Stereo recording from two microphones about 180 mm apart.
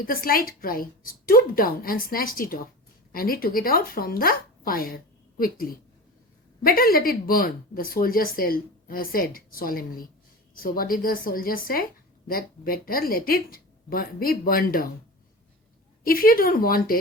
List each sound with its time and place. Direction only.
0.0 s speech: 55° left (ahead or behind)
6.7 s speech: 55° left (ahead or behind)
16.0 s speech: 55° left (ahead or behind)